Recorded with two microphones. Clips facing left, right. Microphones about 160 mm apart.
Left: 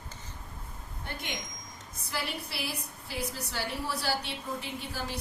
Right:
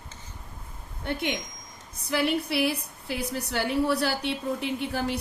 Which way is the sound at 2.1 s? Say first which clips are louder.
Right 11 dB; 60° right (ahead or behind).